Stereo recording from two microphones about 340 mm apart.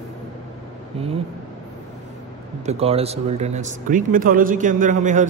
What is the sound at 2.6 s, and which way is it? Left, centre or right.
Speech, centre.